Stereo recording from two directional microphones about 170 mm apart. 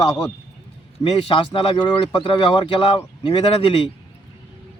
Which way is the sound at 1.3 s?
30° left (ahead or behind).